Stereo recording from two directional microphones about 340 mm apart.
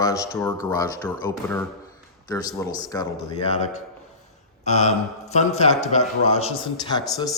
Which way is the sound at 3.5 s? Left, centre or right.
Centre.